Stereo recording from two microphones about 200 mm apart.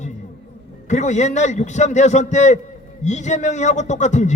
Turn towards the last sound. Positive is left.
turn(degrees=35)  # may be behind; listen again after turning